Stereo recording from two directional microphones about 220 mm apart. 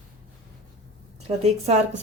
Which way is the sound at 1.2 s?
30° right (ahead or behind).